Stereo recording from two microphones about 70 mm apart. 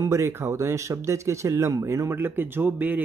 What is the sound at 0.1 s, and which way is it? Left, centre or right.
Speech, right.